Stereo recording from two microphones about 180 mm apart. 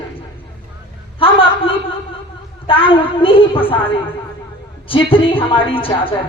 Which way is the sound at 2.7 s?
30° left (ahead or behind).